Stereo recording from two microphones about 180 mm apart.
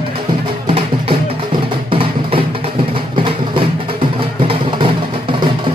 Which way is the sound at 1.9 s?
30° right (ahead or behind).